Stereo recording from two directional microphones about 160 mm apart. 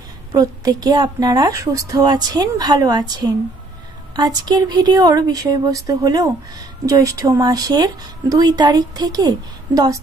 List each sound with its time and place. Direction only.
0.3 s a woman's voice: 25° right (ahead or behind)